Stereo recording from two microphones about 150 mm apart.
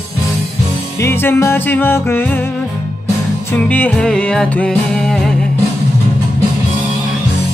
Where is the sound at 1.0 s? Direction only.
15° left (ahead or behind).